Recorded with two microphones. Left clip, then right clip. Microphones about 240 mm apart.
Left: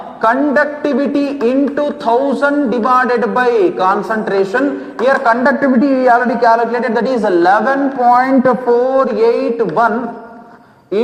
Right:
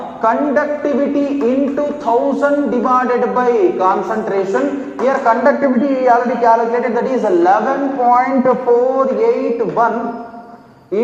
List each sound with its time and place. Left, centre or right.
0.2 s a man's voice: left